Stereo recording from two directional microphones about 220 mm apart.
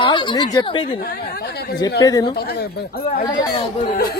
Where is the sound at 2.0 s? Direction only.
20° left (ahead or behind).